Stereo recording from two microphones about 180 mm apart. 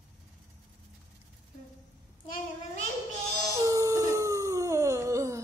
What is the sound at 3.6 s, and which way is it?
Howl, 15° right (ahead or behind).